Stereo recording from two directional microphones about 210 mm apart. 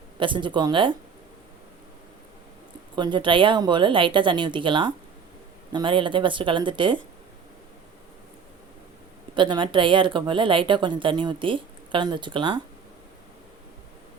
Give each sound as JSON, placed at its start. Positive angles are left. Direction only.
{"t": 0.2, "sound": "speech", "side_deg": -25}
{"t": 2.9, "sound": "speech", "side_deg": -20}
{"t": 9.3, "sound": "speech", "side_deg": -20}